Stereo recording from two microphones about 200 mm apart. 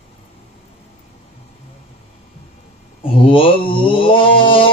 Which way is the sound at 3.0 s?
25° left (ahead or behind).